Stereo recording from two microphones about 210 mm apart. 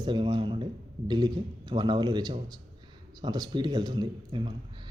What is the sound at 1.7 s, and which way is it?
A man's voice, 20° right (ahead or behind).